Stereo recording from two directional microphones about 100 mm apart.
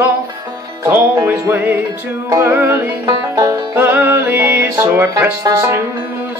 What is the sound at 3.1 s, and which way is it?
Music, 35° right (ahead or behind).